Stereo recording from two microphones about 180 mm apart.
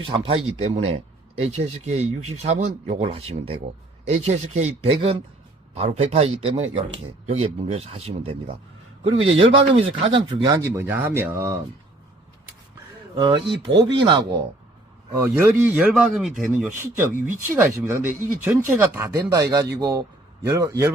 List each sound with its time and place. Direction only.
0.1 s speech: 30° right (ahead or behind); by 11.5 s 15° right (ahead or behind)
13.1 s speech: 25° right (ahead or behind)
15.1 s speech: 15° right (ahead or behind)